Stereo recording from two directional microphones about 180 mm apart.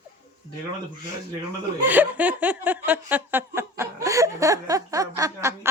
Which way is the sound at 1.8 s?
10° right (ahead or behind).